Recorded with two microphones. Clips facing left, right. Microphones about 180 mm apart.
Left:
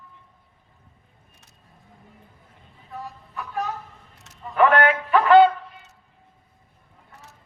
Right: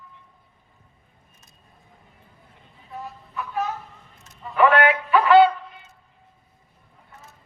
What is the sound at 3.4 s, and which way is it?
Music, 35° left (ahead or behind).